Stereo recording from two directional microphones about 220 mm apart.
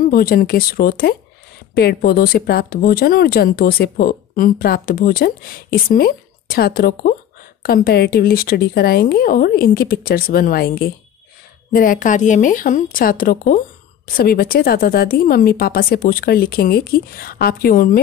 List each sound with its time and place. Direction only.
0.0 s speech: 40° left (ahead or behind)